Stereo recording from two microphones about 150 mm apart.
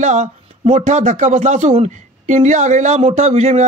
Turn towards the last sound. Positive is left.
turn(degrees=-50)  # may be behind; listen again after turning